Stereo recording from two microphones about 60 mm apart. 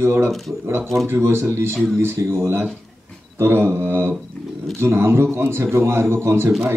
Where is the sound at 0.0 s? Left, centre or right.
Right.